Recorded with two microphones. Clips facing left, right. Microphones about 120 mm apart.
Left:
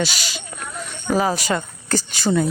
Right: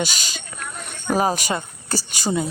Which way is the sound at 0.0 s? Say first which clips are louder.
Left 2 dB; 45° right (ahead or behind).